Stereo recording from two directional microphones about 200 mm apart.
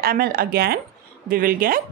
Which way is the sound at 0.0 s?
50° right (ahead or behind).